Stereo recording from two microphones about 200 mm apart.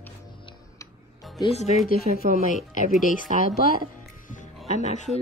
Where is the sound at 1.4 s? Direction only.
30° left (ahead or behind).